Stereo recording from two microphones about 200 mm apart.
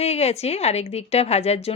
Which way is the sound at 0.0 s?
30° left (ahead or behind).